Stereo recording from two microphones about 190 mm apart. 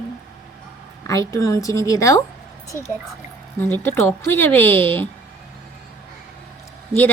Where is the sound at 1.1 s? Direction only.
15° left (ahead or behind).